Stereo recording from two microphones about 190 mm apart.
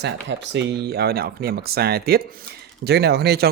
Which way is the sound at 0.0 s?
65° right (ahead or behind).